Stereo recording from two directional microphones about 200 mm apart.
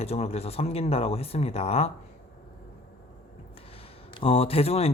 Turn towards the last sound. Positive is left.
turn(degrees=30)  # may be behind; listen again after turning